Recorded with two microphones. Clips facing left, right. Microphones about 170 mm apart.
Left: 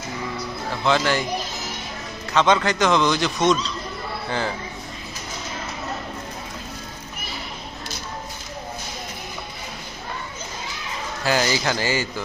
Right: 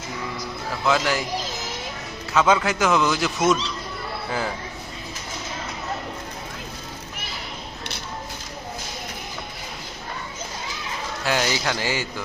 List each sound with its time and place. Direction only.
0.7 s a man's voice: centre (ahead or behind)
2.3 s a man's voice: 5° right (ahead or behind)
11.3 s a man's voice: centre (ahead or behind)